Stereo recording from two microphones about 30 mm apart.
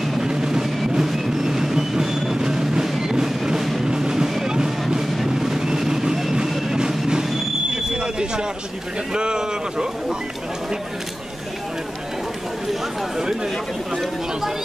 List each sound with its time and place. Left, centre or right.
0.2 s music: right
3.5 s music: centre
3.8 s music: right
5.2 s vehicle: centre
6.7 s music: right
7.7 s smoke detector: right
9.1 s a sound: right